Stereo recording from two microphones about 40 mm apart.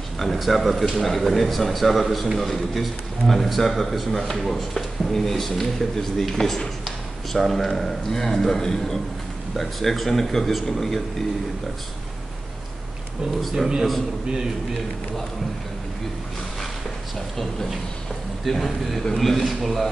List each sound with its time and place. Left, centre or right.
0.2 s a man's voice: centre
13.4 s a man's voice: centre
14.3 s a man's voice: centre
18.4 s a man's voice: centre